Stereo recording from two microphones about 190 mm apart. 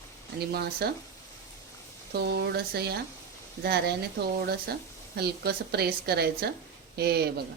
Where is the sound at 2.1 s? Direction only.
60° right (ahead or behind).